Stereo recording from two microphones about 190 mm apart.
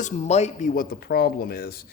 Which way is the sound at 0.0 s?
35° left (ahead or behind).